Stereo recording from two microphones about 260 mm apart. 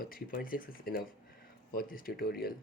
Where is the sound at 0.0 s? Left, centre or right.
Left.